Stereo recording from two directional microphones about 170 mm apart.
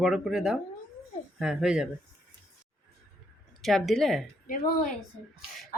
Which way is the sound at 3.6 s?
Centre (ahead or behind).